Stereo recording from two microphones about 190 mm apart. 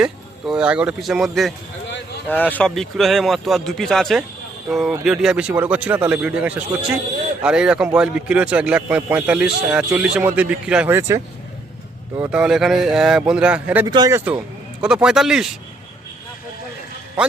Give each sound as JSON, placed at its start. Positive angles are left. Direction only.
{"t": 0.0, "sound": "speech", "side_deg": -5}
{"t": 13.8, "sound": "speech", "side_deg": -20}
{"t": 14.3, "sound": "speech", "side_deg": -5}